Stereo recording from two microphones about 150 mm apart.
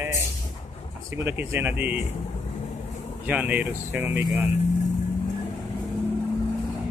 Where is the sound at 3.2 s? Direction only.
10° right (ahead or behind).